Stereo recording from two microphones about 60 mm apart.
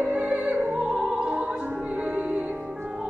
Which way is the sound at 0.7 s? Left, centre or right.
Centre.